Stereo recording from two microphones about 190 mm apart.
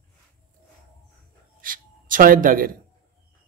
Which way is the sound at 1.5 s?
45° right (ahead or behind).